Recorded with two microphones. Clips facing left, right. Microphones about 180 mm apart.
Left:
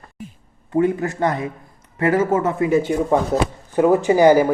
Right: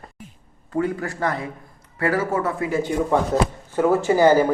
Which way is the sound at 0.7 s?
20° left (ahead or behind).